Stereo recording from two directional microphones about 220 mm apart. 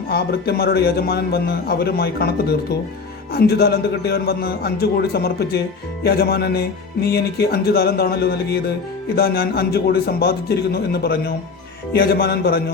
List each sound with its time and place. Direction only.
0.1 s speech: 45° left (ahead or behind)